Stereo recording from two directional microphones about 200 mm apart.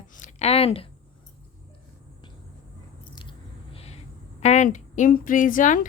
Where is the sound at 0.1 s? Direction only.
35° left (ahead or behind).